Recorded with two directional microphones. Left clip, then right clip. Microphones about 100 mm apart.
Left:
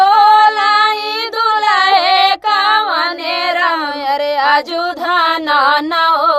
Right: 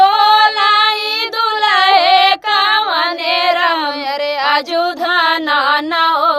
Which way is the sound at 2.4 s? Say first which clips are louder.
Left 1 dB; 45° left (ahead or behind).